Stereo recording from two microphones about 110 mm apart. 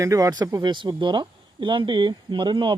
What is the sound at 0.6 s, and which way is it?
Speech, 50° right (ahead or behind).